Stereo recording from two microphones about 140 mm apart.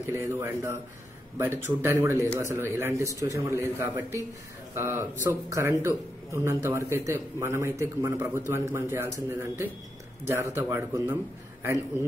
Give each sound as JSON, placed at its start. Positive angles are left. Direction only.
{"t": 0.0, "sound": "a man's voice", "side_deg": -20}